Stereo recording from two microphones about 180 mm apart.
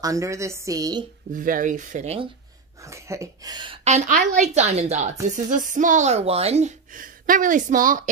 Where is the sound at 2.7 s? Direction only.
15° right (ahead or behind).